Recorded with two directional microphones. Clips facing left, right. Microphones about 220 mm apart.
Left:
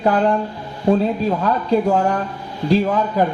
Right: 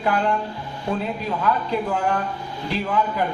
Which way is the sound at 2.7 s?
45° left (ahead or behind).